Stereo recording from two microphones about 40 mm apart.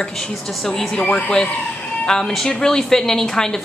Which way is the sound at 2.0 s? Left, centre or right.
Centre.